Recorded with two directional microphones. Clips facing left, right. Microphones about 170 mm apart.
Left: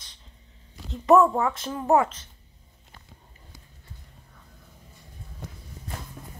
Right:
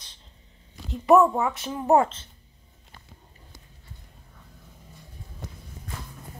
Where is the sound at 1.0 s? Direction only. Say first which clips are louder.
Even; 15° right (ahead or behind).